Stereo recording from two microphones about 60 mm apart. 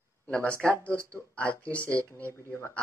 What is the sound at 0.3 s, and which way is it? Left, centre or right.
Speech, left.